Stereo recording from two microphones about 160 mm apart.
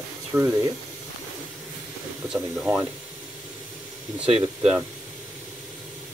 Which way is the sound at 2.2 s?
5° right (ahead or behind).